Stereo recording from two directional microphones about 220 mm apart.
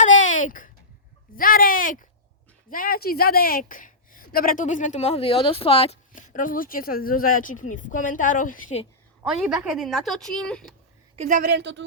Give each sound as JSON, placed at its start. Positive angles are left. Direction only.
{"t": 0.0, "sound": "a sound", "side_deg": 35}
{"t": 1.4, "sound": "a woman's voice", "side_deg": 40}
{"t": 9.2, "sound": "a woman's voice", "side_deg": -5}
{"t": 11.2, "sound": "a woman's voice", "side_deg": -35}